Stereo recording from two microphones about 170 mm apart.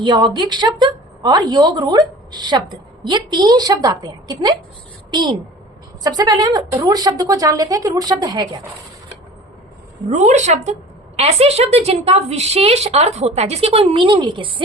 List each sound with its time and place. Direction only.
0.0 s a woman's voice: 30° right (ahead or behind)
10.1 s a woman's voice: 45° right (ahead or behind); by 14.5 s 30° right (ahead or behind)